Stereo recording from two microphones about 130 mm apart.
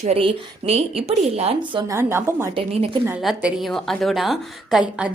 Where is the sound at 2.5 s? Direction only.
45° right (ahead or behind).